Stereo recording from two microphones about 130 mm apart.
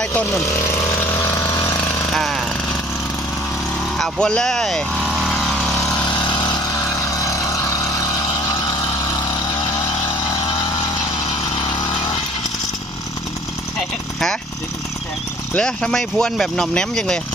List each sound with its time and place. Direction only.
0.0 s speech: 10° left (ahead or behind)
1.1 s chainsaw: 20° left (ahead or behind)
2.1 s jackhammer: centre (ahead or behind)
3.9 s vehicle: 5° left (ahead or behind)
6.1 s vehicle: 35° left (ahead or behind)
15.5 s speech: 5° left (ahead or behind)